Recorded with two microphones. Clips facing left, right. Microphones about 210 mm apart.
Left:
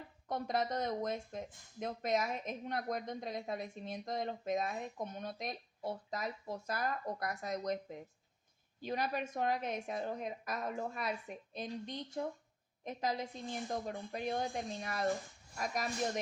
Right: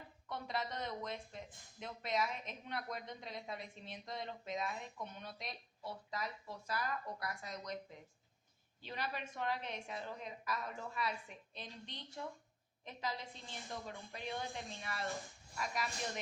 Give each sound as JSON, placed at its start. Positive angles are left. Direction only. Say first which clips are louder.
{"t": 0.3, "sound": "speech", "louder": "left 7 dB", "side_deg": 45}
{"t": 8.8, "sound": "speech", "louder": "left 7 dB", "side_deg": 45}